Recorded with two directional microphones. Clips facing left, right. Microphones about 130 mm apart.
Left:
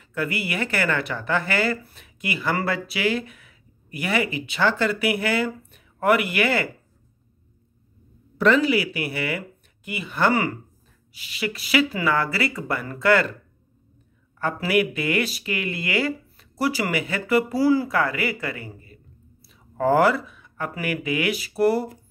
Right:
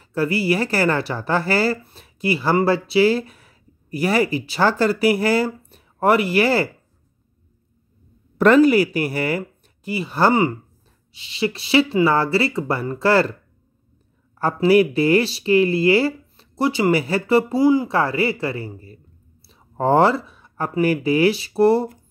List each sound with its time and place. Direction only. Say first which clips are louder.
0.0 s speech: right 7 dB; 35° right (ahead or behind)
8.4 s speech: right 6 dB; 45° right (ahead or behind)
10.3 s speech: right 5 dB; 20° right (ahead or behind)
14.4 s speech: right 7 dB; 35° right (ahead or behind)
16.9 s speech: right 5 dB; 35° right (ahead or behind)